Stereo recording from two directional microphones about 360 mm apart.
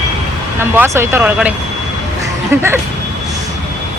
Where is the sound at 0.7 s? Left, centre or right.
Centre.